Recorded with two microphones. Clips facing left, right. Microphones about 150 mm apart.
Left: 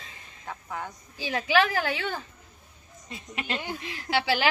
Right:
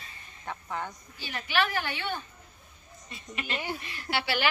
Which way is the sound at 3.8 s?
90° left.